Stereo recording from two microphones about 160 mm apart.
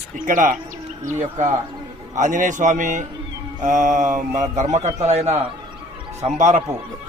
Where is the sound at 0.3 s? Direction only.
55° right (ahead or behind).